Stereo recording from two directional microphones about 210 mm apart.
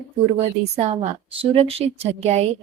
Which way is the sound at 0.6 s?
30° right (ahead or behind).